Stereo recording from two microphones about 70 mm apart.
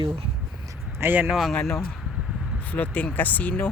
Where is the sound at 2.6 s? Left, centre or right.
Left.